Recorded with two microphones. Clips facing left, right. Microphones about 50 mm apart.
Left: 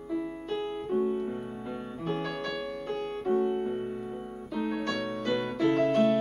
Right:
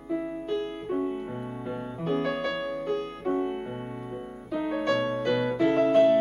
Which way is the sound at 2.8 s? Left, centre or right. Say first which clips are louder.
Right 3 dB; centre.